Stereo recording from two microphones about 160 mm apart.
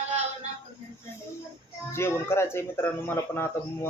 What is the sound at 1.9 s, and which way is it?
A man's voice, 15° left (ahead or behind).